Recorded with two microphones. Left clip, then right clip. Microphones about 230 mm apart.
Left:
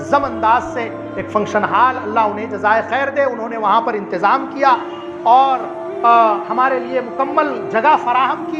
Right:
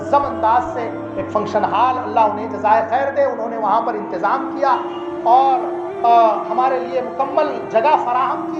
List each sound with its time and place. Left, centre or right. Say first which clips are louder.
0.1 s a woman's voice: left 1 dB; left
5.2 s music: left 2 dB; left
6.0 s a woman's voice: left 1 dB; left